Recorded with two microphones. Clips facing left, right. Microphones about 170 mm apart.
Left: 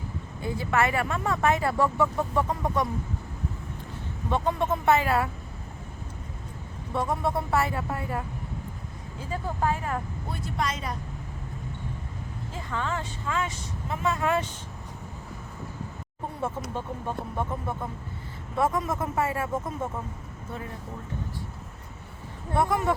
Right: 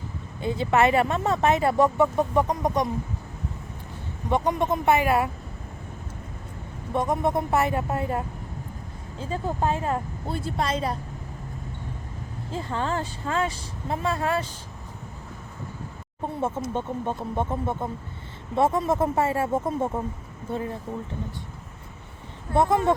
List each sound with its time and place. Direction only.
0.4 s speech: 25° right (ahead or behind)
4.3 s speech: 15° right (ahead or behind)
6.9 s speech: 20° right (ahead or behind)
9.3 s speech: 25° right (ahead or behind)
12.5 s speech: 30° right (ahead or behind)
16.7 s speech: 25° right (ahead or behind)
22.5 s speech: 25° right (ahead or behind)